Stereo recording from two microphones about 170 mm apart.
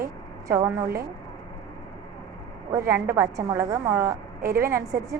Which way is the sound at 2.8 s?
65° right (ahead or behind).